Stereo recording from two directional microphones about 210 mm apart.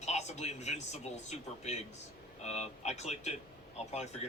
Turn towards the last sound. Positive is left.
turn(degrees=30)  # may be behind; listen again after turning